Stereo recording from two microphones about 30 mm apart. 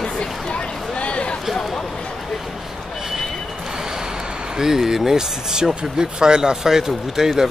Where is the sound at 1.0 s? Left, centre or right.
Left.